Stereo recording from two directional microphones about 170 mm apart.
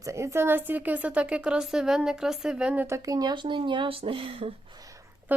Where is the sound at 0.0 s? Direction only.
15° right (ahead or behind).